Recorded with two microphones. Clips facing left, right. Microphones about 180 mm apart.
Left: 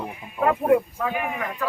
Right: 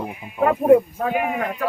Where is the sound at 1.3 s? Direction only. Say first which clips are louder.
Right 4 dB; 40° right (ahead or behind).